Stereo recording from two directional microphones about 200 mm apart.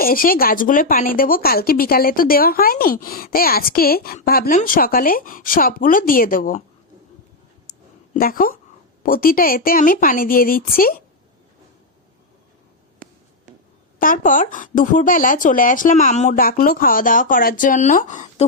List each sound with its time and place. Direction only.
0.0 s speech: 45° left (ahead or behind)
8.1 s speech: 45° left (ahead or behind)
14.0 s speech: 40° left (ahead or behind)